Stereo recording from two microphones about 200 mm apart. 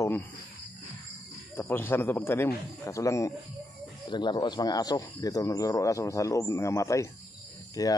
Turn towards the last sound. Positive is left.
turn(degrees=20)  # may be behind; listen again after turning